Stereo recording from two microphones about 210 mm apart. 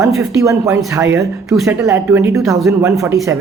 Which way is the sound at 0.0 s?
15° right (ahead or behind).